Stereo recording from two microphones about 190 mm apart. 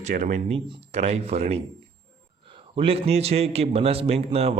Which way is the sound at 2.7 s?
30° right (ahead or behind).